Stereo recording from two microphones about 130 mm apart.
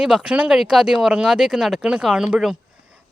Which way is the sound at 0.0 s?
5° right (ahead or behind).